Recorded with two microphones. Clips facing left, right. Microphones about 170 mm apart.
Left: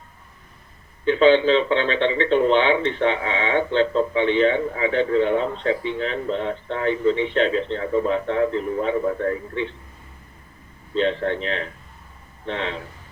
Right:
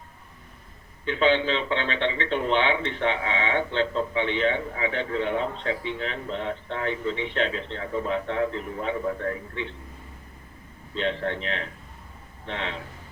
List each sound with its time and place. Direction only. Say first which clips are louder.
1.0 s a man's voice: left 7 dB; 40° left (ahead or behind)
10.9 s speech: left 6 dB; 35° left (ahead or behind)